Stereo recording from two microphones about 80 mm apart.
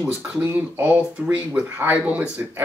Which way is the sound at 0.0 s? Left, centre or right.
Right.